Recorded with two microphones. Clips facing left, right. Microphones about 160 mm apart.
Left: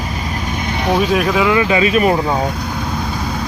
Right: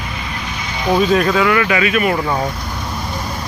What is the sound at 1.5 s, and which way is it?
Speech, 20° left (ahead or behind).